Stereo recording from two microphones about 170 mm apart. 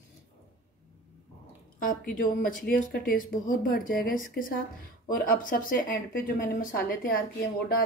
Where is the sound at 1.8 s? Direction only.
55° left (ahead or behind).